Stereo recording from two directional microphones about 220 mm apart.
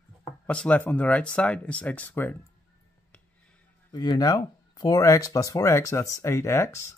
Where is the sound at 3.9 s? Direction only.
20° left (ahead or behind).